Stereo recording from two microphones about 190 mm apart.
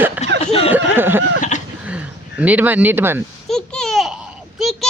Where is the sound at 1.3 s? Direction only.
40° left (ahead or behind).